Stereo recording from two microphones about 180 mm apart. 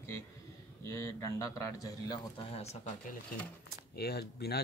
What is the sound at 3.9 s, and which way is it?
Speech, 60° left (ahead or behind).